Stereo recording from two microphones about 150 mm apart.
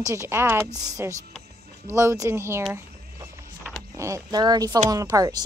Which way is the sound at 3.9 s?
20° right (ahead or behind).